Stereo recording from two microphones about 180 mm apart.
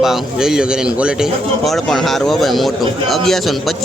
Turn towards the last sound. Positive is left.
turn(degrees=0)  # may be behind; listen again after turning